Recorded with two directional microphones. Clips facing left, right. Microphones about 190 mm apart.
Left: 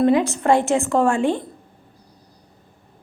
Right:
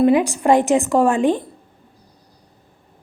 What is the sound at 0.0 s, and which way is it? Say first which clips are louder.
A woman's voice: right 2 dB; 15° right (ahead or behind).